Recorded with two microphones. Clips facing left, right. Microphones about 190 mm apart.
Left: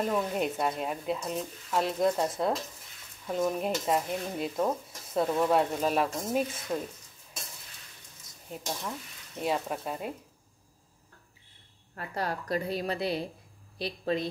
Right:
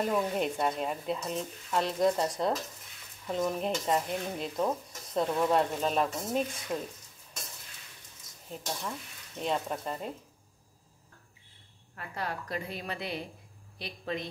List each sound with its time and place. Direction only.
0.0 s stir: centre (ahead or behind)
8.5 s stir: 5° left (ahead or behind)
11.9 s a woman's voice: 40° left (ahead or behind)